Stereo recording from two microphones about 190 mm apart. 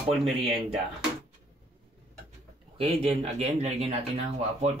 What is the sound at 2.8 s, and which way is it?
Speech, 30° right (ahead or behind).